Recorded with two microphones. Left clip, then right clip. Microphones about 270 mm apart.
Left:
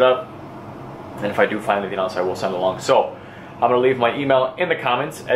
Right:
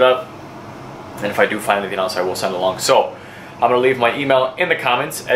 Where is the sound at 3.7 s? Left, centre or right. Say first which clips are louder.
Right 2 dB; centre.